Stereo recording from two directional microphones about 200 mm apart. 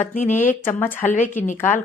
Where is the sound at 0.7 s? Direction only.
10° left (ahead or behind).